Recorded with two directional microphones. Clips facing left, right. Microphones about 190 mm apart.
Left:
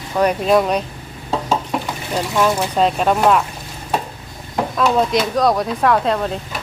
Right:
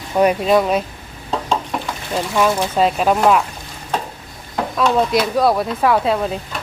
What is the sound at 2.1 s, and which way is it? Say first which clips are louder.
Speech: even; 5° right (ahead or behind).